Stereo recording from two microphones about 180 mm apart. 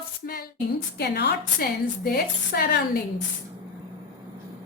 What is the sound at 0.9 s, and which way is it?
A woman's voice, 65° left (ahead or behind).